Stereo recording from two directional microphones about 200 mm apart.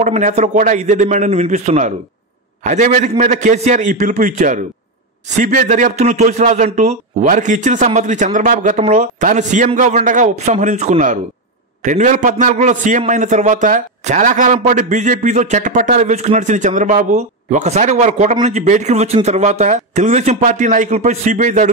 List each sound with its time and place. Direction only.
0.0 s a man's voice: 35° right (ahead or behind)